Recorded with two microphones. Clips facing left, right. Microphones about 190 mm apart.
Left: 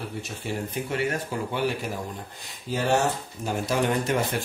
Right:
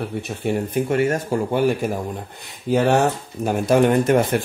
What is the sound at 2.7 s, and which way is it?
Speech, 60° right (ahead or behind).